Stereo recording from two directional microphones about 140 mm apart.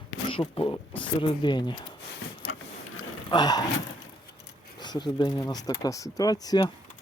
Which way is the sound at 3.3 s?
30° left (ahead or behind).